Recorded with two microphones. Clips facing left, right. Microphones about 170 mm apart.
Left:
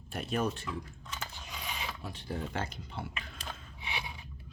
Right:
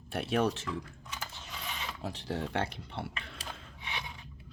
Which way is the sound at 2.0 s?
80° right.